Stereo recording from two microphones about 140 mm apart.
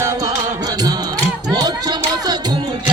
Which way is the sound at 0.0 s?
25° right (ahead or behind).